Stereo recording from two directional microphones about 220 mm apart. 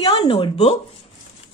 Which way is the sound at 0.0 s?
25° left (ahead or behind).